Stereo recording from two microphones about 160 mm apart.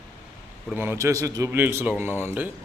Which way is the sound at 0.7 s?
15° right (ahead or behind).